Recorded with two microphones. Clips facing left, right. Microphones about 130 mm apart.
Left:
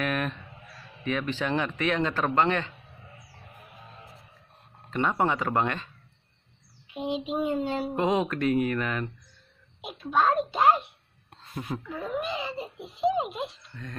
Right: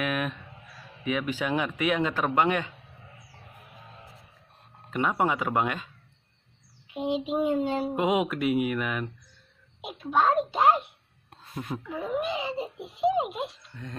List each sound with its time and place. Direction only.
0.0 s a child's voice: 5° right (ahead or behind)
4.9 s a child's voice: 5° right (ahead or behind)
6.9 s a child's voice: 20° right (ahead or behind)
7.4 s a child's voice: 10° right (ahead or behind)